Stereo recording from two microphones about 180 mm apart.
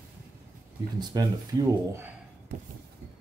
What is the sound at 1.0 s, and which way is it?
Speech, 20° right (ahead or behind).